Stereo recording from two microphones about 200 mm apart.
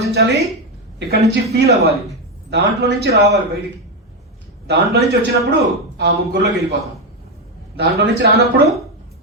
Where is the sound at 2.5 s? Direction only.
55° right (ahead or behind).